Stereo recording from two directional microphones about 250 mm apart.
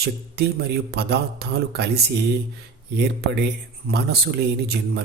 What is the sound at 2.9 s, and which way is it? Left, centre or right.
A man's voice, right.